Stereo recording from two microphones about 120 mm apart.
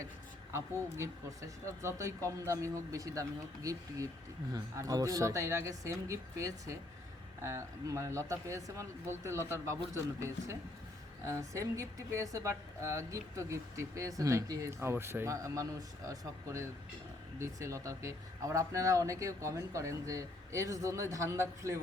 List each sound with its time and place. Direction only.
0.5 s speech: 25° right (ahead or behind)